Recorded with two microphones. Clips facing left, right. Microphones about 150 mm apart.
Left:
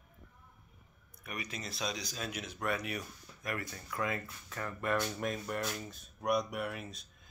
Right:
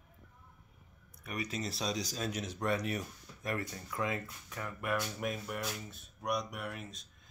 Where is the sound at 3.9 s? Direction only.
20° right (ahead or behind).